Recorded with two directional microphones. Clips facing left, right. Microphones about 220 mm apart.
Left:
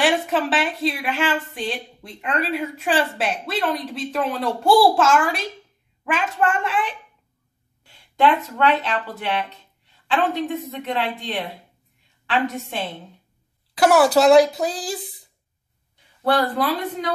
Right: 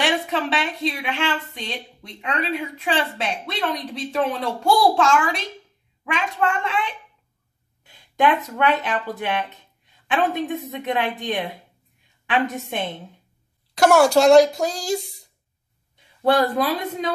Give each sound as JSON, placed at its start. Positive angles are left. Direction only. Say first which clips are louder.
{"t": 0.0, "sound": "a woman's voice", "louder": "left 3 dB", "side_deg": 5}
{"t": 7.8, "sound": "a woman's voice", "louder": "left 1 dB", "side_deg": -15}
{"t": 13.7, "sound": "a woman's voice", "louder": "even", "side_deg": 5}
{"t": 16.3, "sound": "speech", "louder": "right 2 dB", "side_deg": -25}